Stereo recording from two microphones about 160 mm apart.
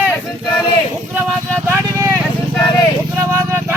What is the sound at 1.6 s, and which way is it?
Vehicle, 15° right (ahead or behind).